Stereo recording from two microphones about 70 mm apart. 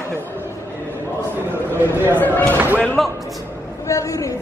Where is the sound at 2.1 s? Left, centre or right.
Left.